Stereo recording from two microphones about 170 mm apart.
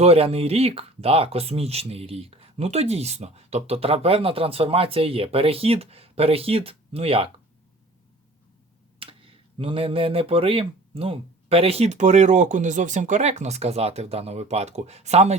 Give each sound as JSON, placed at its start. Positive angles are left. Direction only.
{"t": 0.0, "sound": "speech", "side_deg": -35}
{"t": 9.0, "sound": "speech", "side_deg": -35}